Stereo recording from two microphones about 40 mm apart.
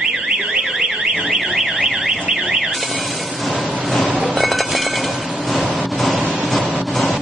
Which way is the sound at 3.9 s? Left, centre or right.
Centre.